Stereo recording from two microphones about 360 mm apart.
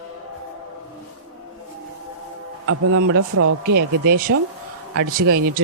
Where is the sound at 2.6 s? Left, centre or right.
Right.